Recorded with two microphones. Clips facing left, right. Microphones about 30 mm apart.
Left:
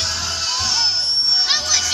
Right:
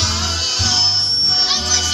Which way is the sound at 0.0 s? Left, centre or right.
Right.